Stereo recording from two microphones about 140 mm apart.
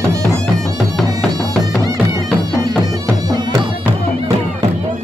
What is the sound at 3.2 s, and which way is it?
Music, 25° right (ahead or behind).